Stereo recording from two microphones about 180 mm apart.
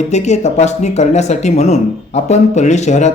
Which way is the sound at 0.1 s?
40° left (ahead or behind).